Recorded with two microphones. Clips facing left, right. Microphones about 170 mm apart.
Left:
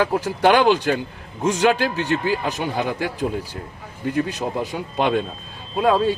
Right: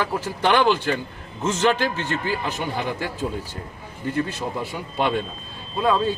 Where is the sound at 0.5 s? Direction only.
15° left (ahead or behind).